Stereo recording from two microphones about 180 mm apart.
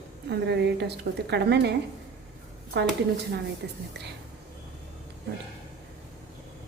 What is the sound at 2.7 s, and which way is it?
A woman's voice, 65° right (ahead or behind).